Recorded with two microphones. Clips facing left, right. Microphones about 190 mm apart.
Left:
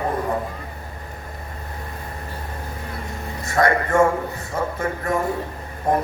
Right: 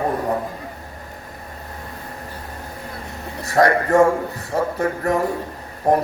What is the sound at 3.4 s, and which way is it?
A man's voice, 35° right (ahead or behind).